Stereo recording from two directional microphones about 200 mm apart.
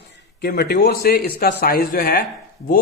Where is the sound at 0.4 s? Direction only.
50° left (ahead or behind).